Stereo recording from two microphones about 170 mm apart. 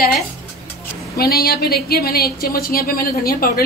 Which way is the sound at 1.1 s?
65° left (ahead or behind).